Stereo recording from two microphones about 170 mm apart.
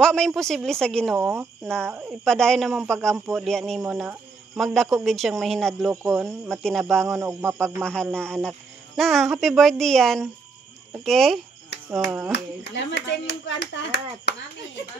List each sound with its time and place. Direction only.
0.0 s speech: 5° left (ahead or behind)
1.9 s speech: 10° right (ahead or behind)
2.2 s speech: 5° left (ahead or behind)
5.9 s speech: 10° right (ahead or behind)
6.5 s speech: 5° left (ahead or behind)
12.7 s speech: 90° left
14.3 s speech: 75° left (ahead or behind)